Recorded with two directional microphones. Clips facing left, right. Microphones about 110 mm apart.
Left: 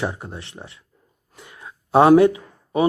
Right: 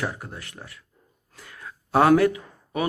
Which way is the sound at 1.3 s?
20° left (ahead or behind).